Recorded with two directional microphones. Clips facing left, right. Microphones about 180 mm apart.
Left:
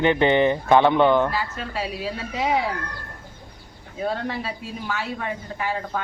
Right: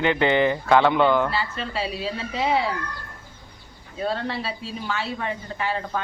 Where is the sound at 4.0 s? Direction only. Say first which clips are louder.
Even; 10° left (ahead or behind).